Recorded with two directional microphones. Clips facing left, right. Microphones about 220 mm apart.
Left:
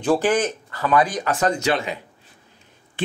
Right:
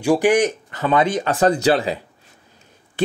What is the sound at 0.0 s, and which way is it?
Speech, 15° right (ahead or behind).